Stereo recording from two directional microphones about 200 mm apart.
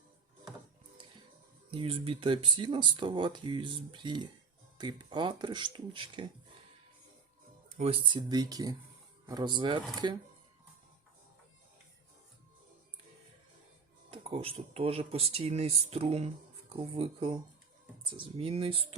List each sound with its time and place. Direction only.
1.7 s speech: 25° right (ahead or behind)
7.8 s speech: 30° right (ahead or behind)
14.1 s speech: 30° right (ahead or behind)